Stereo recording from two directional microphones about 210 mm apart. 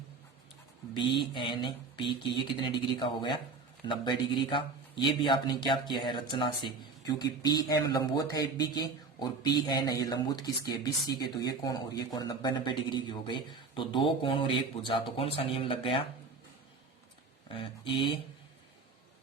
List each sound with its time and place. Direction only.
0.9 s a man's voice: 25° left (ahead or behind)
17.5 s a man's voice: 25° left (ahead or behind)